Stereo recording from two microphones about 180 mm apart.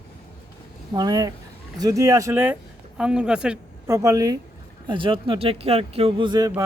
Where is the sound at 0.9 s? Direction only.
20° right (ahead or behind); by 3.6 s 5° right (ahead or behind).